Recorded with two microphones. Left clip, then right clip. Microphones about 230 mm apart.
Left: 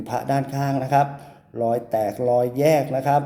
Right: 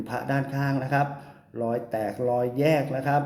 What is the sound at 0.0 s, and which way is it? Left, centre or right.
Speech, centre.